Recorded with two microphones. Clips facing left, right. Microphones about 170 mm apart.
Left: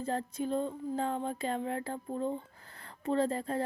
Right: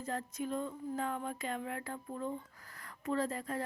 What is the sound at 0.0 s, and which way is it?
Speech, 30° left (ahead or behind).